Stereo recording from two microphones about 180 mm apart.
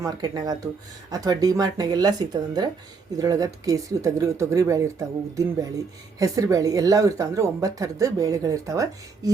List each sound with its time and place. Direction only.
0.0 s speech: 20° right (ahead or behind)
6.1 s speech: 20° right (ahead or behind)